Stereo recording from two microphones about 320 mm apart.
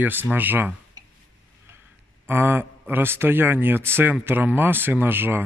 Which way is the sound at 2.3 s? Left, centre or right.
Centre.